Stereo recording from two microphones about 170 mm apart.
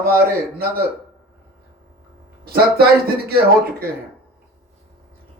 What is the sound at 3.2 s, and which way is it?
Speech, 65° right (ahead or behind).